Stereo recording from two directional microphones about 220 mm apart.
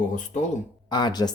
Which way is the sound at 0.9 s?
20° left (ahead or behind).